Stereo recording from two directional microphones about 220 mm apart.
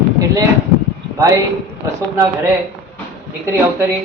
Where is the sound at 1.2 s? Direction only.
15° right (ahead or behind).